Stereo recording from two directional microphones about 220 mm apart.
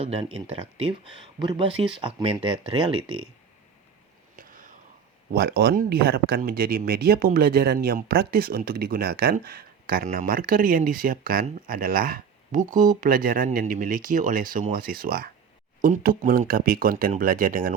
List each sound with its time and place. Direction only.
0.0 s speech: 25° right (ahead or behind)
4.4 s a sound: 40° right (ahead or behind)
5.3 s speech: 50° right (ahead or behind)